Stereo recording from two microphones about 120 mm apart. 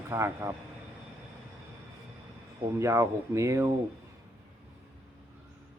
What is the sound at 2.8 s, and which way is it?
Speech, 25° right (ahead or behind).